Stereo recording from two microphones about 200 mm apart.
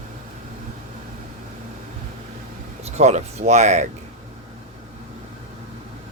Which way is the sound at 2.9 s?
35° right (ahead or behind).